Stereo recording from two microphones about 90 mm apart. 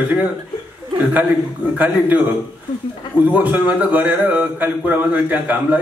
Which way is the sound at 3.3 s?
15° right (ahead or behind).